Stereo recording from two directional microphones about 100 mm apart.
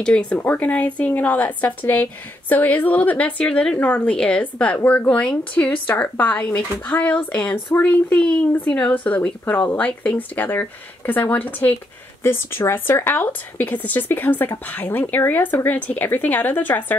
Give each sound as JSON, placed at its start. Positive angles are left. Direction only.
{"t": 0.0, "sound": "a woman's voice", "side_deg": 10}